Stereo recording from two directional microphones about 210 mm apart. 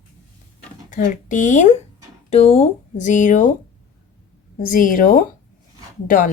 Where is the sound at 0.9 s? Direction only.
40° left (ahead or behind).